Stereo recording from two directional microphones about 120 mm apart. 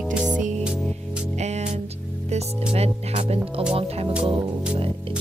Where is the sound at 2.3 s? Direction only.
60° right (ahead or behind).